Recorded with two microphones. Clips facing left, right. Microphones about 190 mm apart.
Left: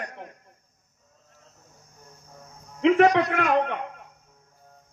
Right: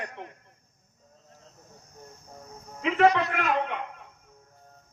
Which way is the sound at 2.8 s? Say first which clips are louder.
Left 4 dB; 75° left (ahead or behind).